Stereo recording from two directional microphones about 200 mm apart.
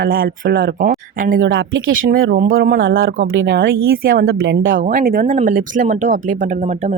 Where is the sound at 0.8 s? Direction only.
45° right (ahead or behind).